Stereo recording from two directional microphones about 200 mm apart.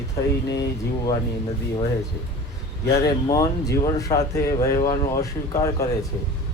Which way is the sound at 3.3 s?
15° left (ahead or behind).